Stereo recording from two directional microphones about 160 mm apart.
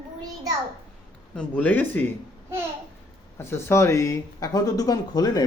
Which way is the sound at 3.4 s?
15° left (ahead or behind).